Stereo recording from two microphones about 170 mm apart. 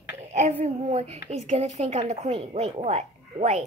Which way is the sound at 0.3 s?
40° right (ahead or behind).